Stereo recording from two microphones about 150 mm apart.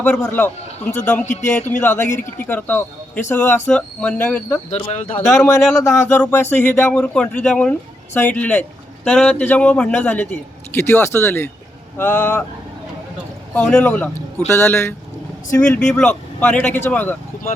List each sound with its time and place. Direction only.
0.0 s speech: 10° left (ahead or behind)
1.2 s speech: 55° left (ahead or behind)
1.8 s speech: 15° left (ahead or behind)
4.7 s speech: 45° left (ahead or behind)
5.5 s speech: centre (ahead or behind)
5.8 s speech: 15° left (ahead or behind)
13.5 s speech: 5° left (ahead or behind)